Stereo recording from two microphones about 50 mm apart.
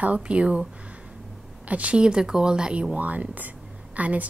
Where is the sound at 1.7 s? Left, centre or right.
Right.